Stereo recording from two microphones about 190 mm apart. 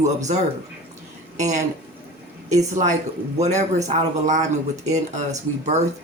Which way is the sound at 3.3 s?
35° right (ahead or behind).